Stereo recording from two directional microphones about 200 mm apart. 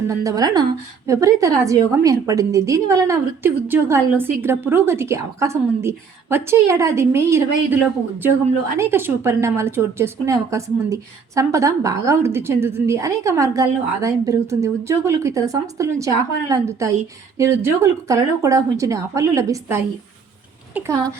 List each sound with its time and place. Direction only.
0.1 s a woman's voice: 15° right (ahead or behind)
8.8 s a woman's voice: 10° right (ahead or behind)